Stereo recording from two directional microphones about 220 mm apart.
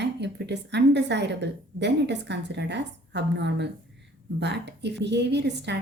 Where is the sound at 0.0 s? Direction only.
50° right (ahead or behind).